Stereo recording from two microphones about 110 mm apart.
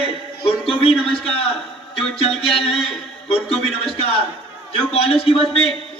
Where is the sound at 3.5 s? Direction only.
65° left (ahead or behind).